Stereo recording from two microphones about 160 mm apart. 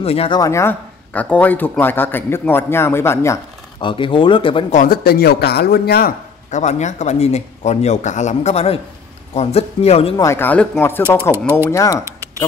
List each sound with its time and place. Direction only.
0.0 s speech: 35° left (ahead or behind)
0.4 s speech: 15° left (ahead or behind)
3.8 s speech: 30° left (ahead or behind)
4.6 s speech: 60° left (ahead or behind); by 6.1 s 75° left (ahead or behind)
6.5 s speech: 45° left (ahead or behind)
10.1 s speech: 15° left (ahead or behind)
11.0 s speech: 15° right (ahead or behind)
11.7 s speech: 20° left (ahead or behind)